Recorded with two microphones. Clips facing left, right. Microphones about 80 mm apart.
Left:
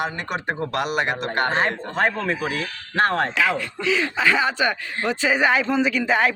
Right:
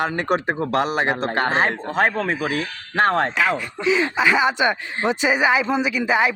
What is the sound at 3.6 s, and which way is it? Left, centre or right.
Speech, centre.